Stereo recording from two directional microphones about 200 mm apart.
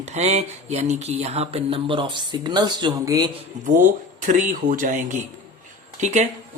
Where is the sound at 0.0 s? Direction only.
35° right (ahead or behind).